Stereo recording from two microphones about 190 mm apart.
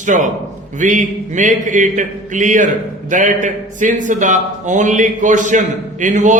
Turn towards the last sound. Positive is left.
turn(degrees=-40)  # may be behind; listen again after turning